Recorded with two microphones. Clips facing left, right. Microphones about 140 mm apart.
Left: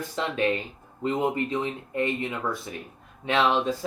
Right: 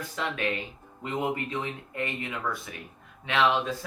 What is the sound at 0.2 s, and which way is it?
Speech, 30° left (ahead or behind).